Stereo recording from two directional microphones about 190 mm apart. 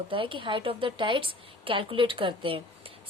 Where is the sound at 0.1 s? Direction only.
25° right (ahead or behind).